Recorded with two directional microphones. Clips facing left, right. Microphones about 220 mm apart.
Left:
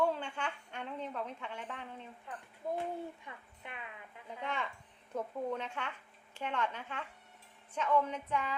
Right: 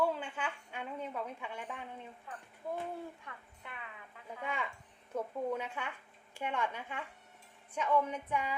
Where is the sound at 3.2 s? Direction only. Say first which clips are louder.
Left 1 dB; 20° left (ahead or behind).